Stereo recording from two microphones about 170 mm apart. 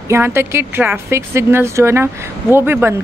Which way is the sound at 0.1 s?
15° right (ahead or behind).